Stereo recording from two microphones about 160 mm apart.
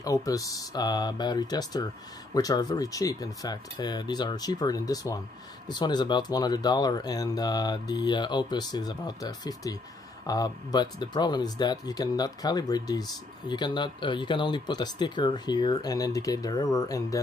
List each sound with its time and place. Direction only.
0.0 s speech: 20° left (ahead or behind)